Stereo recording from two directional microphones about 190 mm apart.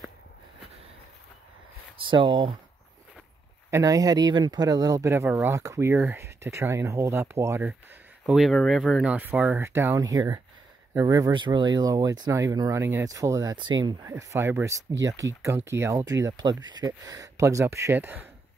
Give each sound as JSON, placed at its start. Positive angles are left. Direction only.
{"t": 2.0, "sound": "speech", "side_deg": -25}
{"t": 3.7, "sound": "speech", "side_deg": -20}